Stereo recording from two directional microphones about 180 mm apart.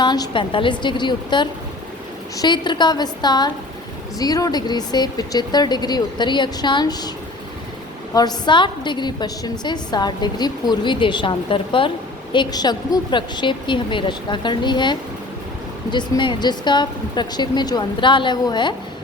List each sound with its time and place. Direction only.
0.0 s a woman's voice: 25° left (ahead or behind)
8.1 s a woman's voice: 20° left (ahead or behind)